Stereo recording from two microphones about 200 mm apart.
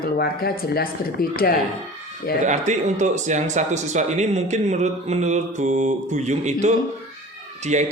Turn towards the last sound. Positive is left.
turn(degrees=-35)  # may be behind; listen again after turning